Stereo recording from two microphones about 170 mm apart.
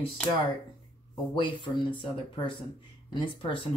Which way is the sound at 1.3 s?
30° left (ahead or behind).